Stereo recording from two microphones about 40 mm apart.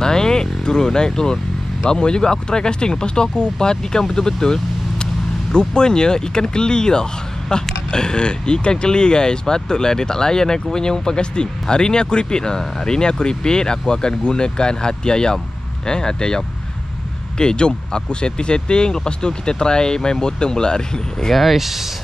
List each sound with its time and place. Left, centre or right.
0.0 s vehicle: centre
1.9 s speech: left
21.3 s speech: centre